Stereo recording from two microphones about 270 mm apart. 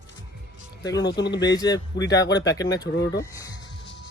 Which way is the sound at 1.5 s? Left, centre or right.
Centre.